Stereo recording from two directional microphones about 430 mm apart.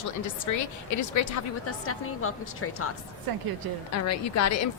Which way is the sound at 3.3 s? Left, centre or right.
Right.